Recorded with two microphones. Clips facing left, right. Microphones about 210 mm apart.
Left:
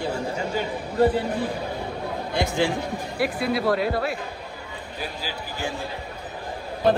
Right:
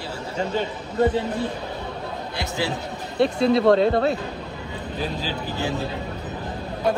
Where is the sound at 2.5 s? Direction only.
20° right (ahead or behind).